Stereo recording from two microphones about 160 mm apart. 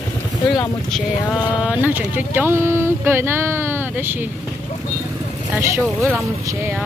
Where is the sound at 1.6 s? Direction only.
10° right (ahead or behind).